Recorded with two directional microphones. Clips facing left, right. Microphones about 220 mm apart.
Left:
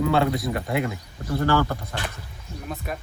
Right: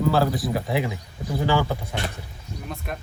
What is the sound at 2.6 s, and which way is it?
Speech, centre (ahead or behind).